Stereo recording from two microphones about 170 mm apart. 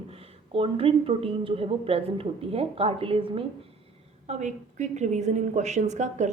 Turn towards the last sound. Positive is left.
turn(degrees=-45)  # may be behind; listen again after turning